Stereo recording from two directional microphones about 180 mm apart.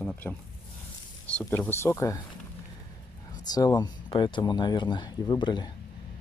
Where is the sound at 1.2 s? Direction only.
5° left (ahead or behind).